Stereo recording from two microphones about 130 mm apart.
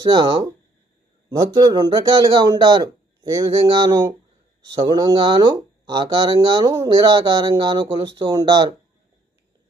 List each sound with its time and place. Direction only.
0.0 s speech: 35° right (ahead or behind)